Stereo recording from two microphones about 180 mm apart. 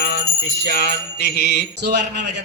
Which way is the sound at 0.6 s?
65° left (ahead or behind).